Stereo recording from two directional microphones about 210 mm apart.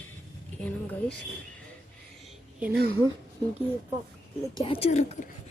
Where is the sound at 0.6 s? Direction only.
5° left (ahead or behind).